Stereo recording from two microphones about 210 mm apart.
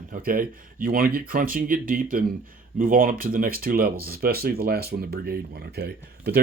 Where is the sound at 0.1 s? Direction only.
45° right (ahead or behind).